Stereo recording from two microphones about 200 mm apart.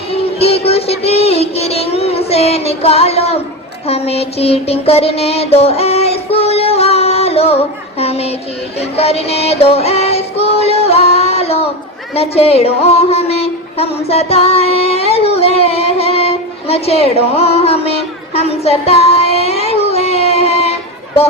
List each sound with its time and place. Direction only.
0.1 s music: 30° left (ahead or behind)
3.8 s child singing: 30° left (ahead or behind)
9.0 s music: 30° left (ahead or behind)